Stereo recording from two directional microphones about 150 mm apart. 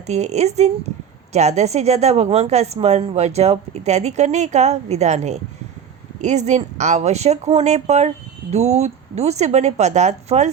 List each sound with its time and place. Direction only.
0.1 s speech: 45° right (ahead or behind)